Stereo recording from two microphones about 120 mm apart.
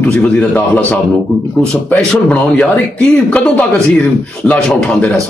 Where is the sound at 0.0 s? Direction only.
5° left (ahead or behind).